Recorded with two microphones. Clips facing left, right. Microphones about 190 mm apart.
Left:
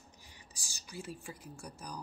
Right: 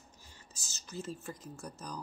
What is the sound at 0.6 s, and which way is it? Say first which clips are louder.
Speech: right 3 dB; 15° left (ahead or behind).